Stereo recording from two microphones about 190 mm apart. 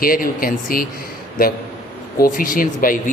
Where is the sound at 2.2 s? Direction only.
45° left (ahead or behind).